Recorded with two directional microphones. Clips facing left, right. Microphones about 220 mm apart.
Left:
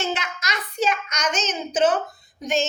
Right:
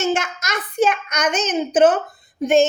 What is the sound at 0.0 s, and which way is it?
A child's voice, 50° right (ahead or behind).